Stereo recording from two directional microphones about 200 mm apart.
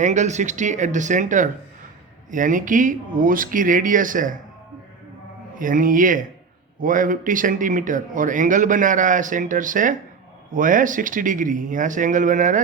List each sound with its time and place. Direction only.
0.0 s speech: 35° right (ahead or behind)
5.5 s speech: 40° right (ahead or behind)